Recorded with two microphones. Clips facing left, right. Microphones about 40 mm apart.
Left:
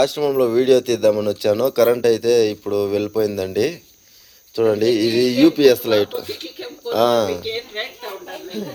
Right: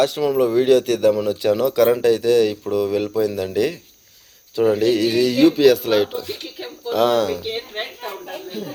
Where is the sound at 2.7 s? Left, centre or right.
Centre.